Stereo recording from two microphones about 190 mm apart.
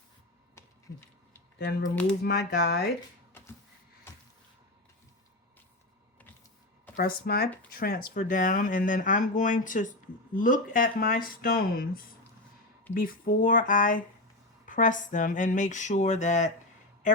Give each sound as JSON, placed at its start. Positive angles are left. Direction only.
{"t": 1.5, "sound": "speech", "side_deg": 55}
{"t": 6.9, "sound": "speech", "side_deg": 55}